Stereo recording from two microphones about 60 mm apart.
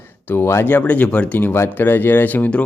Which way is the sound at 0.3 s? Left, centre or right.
Left.